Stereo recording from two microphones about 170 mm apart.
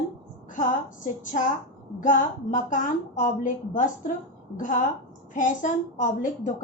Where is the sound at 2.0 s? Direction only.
50° left (ahead or behind).